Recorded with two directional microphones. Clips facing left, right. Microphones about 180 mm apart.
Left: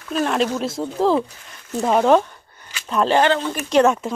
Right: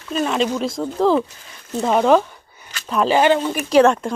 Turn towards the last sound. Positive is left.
turn(degrees=0)  # may be behind; listen again after turning